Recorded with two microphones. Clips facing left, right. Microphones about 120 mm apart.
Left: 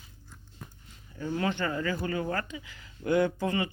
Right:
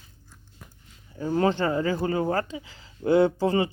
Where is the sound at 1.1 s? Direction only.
35° right (ahead or behind).